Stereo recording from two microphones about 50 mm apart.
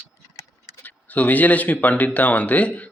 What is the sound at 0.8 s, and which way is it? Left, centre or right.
Speech, left.